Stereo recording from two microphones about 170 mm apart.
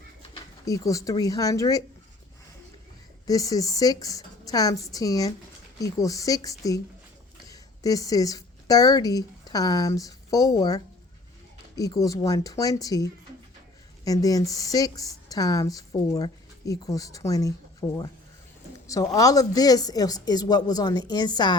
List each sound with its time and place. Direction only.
0.6 s speech: 20° left (ahead or behind)
3.2 s speech: 20° left (ahead or behind)